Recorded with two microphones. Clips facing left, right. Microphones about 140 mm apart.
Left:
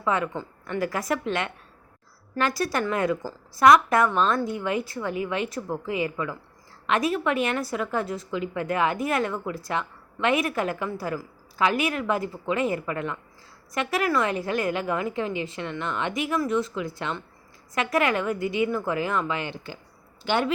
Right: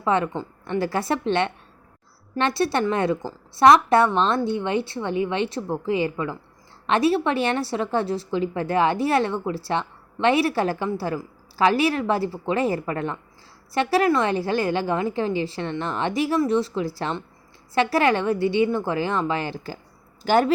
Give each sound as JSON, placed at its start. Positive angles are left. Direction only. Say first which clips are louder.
{"t": 0.0, "sound": "a woman's voice", "louder": "right 4 dB", "side_deg": -30}